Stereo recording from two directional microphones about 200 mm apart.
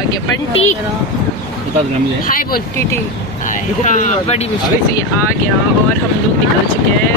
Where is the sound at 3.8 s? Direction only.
35° left (ahead or behind).